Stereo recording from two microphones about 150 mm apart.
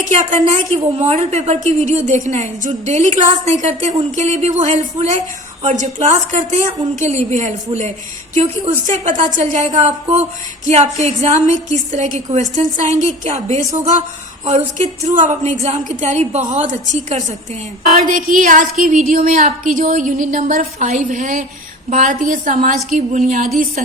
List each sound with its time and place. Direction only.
0.0 s a woman's voice: 55° right (ahead or behind)
9.0 s a woman's voice: 55° right (ahead or behind)